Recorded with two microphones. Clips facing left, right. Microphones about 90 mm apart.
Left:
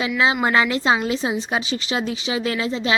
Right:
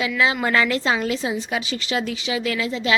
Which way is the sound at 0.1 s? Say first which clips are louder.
Left 4 dB; 25° left (ahead or behind).